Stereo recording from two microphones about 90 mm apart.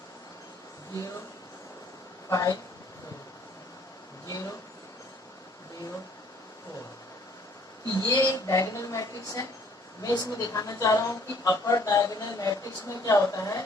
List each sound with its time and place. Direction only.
2.3 s a woman's voice: 40° left (ahead or behind)
4.3 s a sound: 35° left (ahead or behind)
7.9 s a woman's voice: 45° left (ahead or behind)